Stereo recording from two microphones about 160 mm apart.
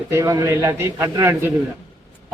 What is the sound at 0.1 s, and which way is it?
A man's voice, 20° right (ahead or behind).